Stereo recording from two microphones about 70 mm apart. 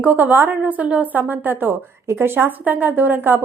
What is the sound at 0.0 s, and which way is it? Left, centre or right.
A woman's voice, right.